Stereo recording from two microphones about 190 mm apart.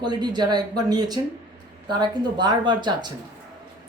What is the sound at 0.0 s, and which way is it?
Speech, 25° right (ahead or behind).